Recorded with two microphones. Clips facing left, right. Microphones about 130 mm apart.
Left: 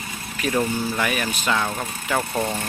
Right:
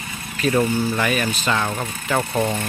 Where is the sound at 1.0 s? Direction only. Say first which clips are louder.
Right 3 dB; 10° left (ahead or behind).